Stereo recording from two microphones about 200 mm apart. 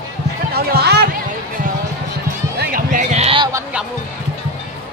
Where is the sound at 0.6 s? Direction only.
55° right (ahead or behind).